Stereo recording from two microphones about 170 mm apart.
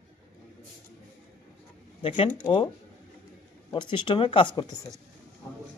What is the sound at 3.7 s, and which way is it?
Speech, 30° left (ahead or behind).